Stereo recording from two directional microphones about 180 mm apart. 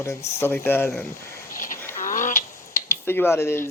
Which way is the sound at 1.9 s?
45° left (ahead or behind).